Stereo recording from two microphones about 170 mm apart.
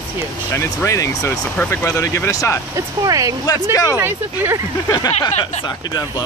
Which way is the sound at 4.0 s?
10° right (ahead or behind).